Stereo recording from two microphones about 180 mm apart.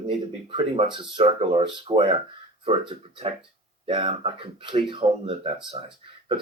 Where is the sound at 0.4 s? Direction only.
30° right (ahead or behind).